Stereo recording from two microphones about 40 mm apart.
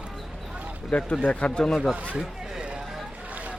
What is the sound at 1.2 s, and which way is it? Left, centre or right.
Speech, left.